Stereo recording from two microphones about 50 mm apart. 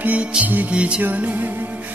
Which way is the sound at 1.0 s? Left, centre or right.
Right.